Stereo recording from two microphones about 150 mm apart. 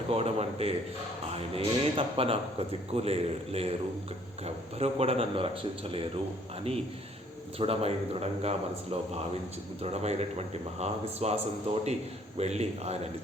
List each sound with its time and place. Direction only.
0.1 s a man's voice: 45° right (ahead or behind)
7.6 s a man's voice: 40° right (ahead or behind)